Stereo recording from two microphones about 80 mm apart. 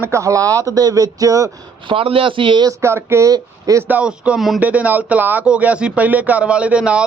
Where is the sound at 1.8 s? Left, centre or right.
Right.